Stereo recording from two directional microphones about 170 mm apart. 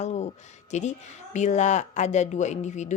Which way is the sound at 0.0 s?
40° left (ahead or behind).